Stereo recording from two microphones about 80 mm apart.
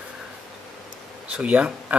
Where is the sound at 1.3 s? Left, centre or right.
Centre.